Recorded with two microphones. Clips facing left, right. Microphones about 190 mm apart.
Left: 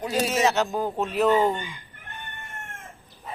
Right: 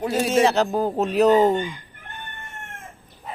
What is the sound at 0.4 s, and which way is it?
Speech, 35° right (ahead or behind).